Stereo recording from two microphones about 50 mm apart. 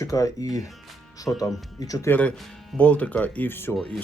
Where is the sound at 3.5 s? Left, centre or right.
Left.